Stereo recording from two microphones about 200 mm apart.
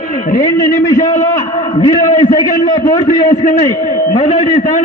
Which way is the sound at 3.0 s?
40° left (ahead or behind).